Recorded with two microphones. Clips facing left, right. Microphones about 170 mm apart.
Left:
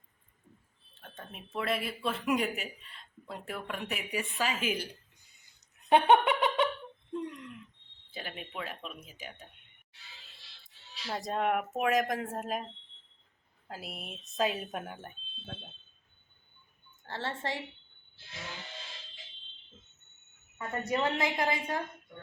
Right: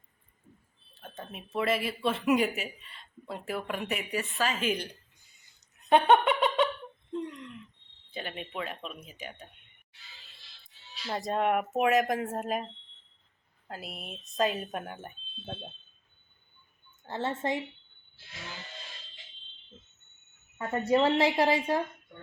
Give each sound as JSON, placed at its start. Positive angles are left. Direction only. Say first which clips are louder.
{"t": 1.1, "sound": "speech", "louder": "right 4 dB", "side_deg": -5}
{"t": 4.1, "sound": "a woman's voice", "louder": "right 1 dB", "side_deg": 10}
{"t": 5.9, "sound": "giggle", "louder": "right 1 dB", "side_deg": 10}
{"t": 7.1, "sound": "a sound", "louder": "right 1 dB", "side_deg": 10}
{"t": 8.1, "sound": "speech", "louder": "right 4 dB", "side_deg": 5}
{"t": 11.1, "sound": "speech", "louder": "right 3 dB", "side_deg": 0}
{"t": 13.7, "sound": "speech", "louder": "right 2 dB", "side_deg": 0}
{"t": 17.1, "sound": "a woman's voice", "louder": "right 5 dB", "side_deg": -20}
{"t": 20.6, "sound": "a woman's voice", "louder": "right 6 dB", "side_deg": -30}